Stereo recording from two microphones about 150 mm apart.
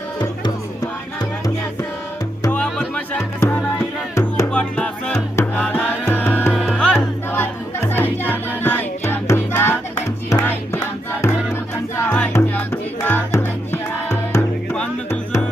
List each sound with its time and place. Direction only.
2.5 s music: 10° left (ahead or behind)
11.9 s music: 10° left (ahead or behind)